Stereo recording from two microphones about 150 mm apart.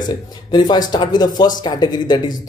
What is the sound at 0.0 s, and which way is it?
Speech, 30° left (ahead or behind).